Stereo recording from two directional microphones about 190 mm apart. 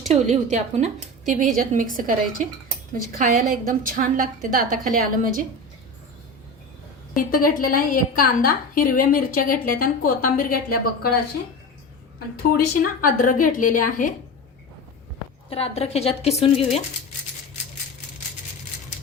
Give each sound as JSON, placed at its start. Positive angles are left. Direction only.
{"t": 0.1, "sound": "a woman's voice", "side_deg": -35}
{"t": 7.2, "sound": "a woman's voice", "side_deg": 45}
{"t": 12.4, "sound": "a woman's voice", "side_deg": 50}
{"t": 15.4, "sound": "a woman's voice", "side_deg": 30}